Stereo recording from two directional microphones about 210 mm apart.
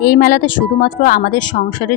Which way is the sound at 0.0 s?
45° left (ahead or behind).